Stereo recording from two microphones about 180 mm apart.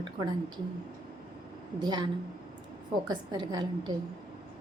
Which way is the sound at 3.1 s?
25° right (ahead or behind).